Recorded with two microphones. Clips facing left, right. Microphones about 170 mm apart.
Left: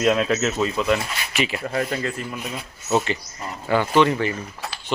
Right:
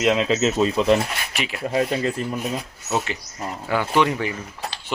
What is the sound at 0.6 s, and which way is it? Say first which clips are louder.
Speech: right 6 dB; 30° right (ahead or behind).